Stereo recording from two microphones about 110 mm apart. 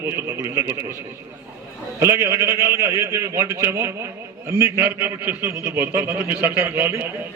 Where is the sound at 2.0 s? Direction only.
25° right (ahead or behind).